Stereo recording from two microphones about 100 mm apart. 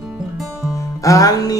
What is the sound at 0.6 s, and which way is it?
Music, 30° left (ahead or behind).